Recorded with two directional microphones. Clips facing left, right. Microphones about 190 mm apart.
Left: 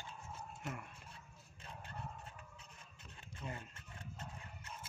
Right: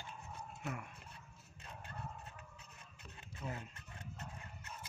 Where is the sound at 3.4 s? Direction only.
10° right (ahead or behind).